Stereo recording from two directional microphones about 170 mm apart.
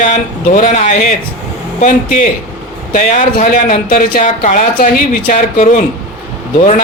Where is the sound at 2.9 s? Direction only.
50° left (ahead or behind).